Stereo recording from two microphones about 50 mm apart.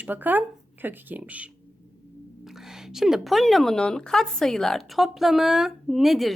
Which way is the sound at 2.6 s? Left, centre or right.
Centre.